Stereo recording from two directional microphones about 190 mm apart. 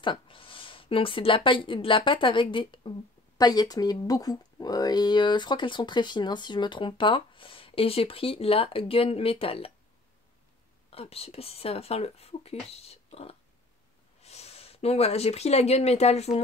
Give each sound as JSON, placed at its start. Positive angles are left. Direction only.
{"t": 0.0, "sound": "speech", "side_deg": 25}
{"t": 10.9, "sound": "speech", "side_deg": 30}